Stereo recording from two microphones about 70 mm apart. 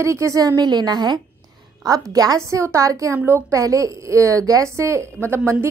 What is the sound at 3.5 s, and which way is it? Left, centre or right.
A woman's voice, right.